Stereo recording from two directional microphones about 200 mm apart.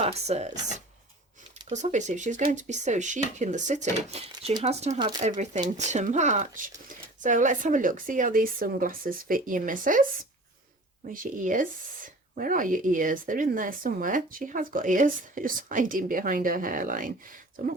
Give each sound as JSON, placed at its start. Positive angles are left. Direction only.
{"t": 0.0, "sound": "speech", "side_deg": -35}
{"t": 1.7, "sound": "speech", "side_deg": -35}
{"t": 4.3, "sound": "speech", "side_deg": -20}
{"t": 4.6, "sound": "speech", "side_deg": -35}
{"t": 11.1, "sound": "speech", "side_deg": -40}